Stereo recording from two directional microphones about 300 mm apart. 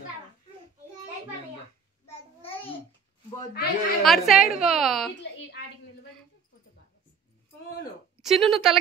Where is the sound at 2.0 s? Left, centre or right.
Centre.